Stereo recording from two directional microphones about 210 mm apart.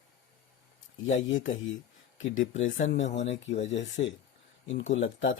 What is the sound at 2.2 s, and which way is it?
Speech, 65° left (ahead or behind).